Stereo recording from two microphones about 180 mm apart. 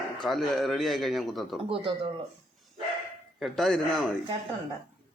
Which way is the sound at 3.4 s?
Centre (ahead or behind).